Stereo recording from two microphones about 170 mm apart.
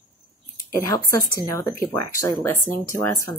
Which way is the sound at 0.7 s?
15° left (ahead or behind).